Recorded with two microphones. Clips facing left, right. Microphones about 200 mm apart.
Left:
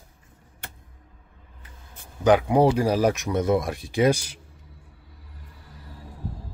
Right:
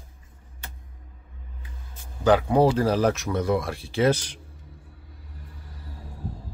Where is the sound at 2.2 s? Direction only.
15° left (ahead or behind).